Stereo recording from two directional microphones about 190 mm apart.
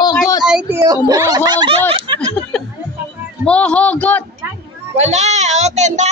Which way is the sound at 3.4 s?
5° left (ahead or behind).